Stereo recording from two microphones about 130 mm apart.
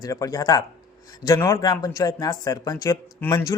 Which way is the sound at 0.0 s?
25° left (ahead or behind).